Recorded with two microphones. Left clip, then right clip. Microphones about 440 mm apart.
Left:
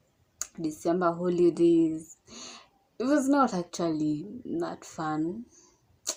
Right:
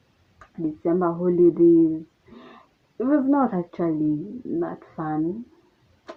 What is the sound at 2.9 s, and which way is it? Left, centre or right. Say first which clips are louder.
A woman's voice: right 3 dB; right.